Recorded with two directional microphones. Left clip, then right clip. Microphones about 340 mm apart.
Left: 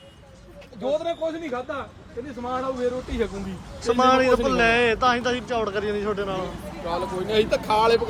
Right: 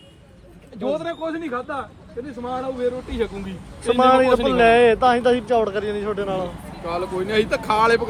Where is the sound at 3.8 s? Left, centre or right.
Centre.